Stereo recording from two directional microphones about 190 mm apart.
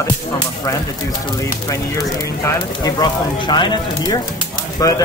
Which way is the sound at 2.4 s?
15° left (ahead or behind).